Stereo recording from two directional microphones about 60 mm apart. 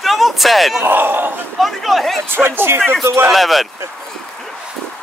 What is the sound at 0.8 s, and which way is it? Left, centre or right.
Speech, right.